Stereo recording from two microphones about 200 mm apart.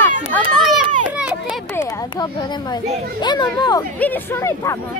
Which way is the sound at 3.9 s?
10° left (ahead or behind).